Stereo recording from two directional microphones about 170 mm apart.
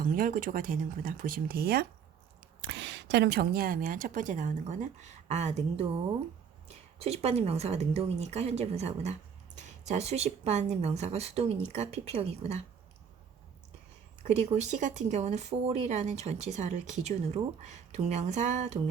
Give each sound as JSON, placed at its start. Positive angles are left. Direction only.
{"t": 0.0, "sound": "speech", "side_deg": -55}
{"t": 2.6, "sound": "speech", "side_deg": -90}
{"t": 7.0, "sound": "speech", "side_deg": -35}
{"t": 14.2, "sound": "speech", "side_deg": -40}